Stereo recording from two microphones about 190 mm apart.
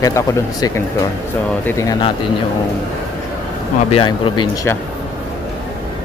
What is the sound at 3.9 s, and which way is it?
Speech, 25° left (ahead or behind).